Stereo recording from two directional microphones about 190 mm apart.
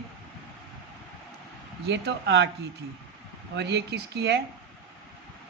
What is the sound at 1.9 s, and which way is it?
Speech, 65° right (ahead or behind).